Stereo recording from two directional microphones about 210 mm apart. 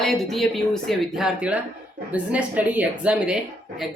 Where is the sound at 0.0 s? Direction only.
Centre (ahead or behind).